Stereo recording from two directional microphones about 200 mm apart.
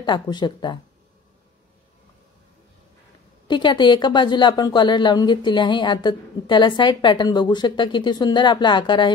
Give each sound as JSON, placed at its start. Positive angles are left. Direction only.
{"t": 0.0, "sound": "speech", "side_deg": 20}
{"t": 3.4, "sound": "speech", "side_deg": 25}